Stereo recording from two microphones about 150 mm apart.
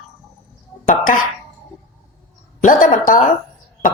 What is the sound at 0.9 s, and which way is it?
Speech, 65° left (ahead or behind).